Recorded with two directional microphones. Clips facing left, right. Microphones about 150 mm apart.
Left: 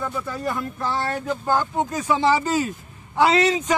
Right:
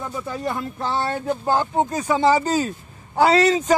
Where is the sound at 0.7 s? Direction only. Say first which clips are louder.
Right 1 dB; 30° right (ahead or behind).